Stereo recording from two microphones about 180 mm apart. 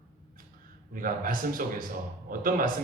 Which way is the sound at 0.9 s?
50° right (ahead or behind).